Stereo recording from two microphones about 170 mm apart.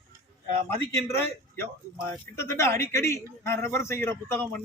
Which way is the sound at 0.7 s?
15° left (ahead or behind).